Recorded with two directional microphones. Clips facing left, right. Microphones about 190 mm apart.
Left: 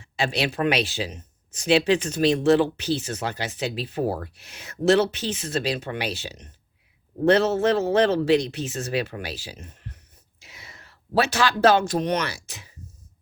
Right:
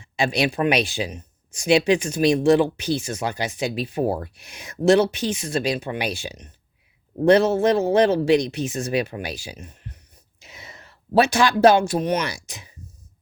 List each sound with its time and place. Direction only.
0.0 s speech: 15° right (ahead or behind)